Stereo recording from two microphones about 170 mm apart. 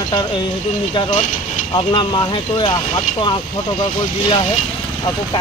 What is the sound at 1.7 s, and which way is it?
Speech, 25° left (ahead or behind).